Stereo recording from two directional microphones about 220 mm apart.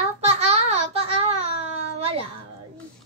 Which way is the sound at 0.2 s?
30° right (ahead or behind).